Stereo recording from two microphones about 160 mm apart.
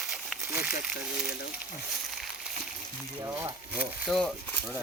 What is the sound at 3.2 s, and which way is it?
Speech, 15° right (ahead or behind).